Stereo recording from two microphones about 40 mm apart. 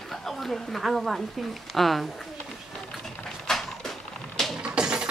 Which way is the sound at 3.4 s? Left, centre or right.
Centre.